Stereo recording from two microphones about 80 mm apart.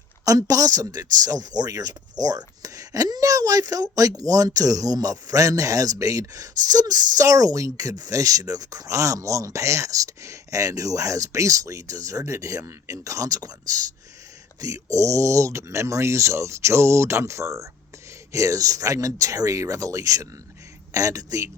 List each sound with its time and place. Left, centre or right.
0.3 s speech: right